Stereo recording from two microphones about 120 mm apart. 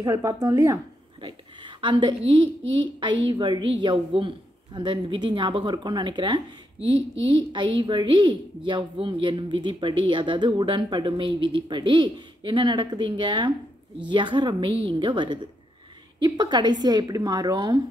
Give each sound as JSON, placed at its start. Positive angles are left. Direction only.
{"t": 0.0, "sound": "speech", "side_deg": -30}
{"t": 1.2, "sound": "a woman's voice", "side_deg": -40}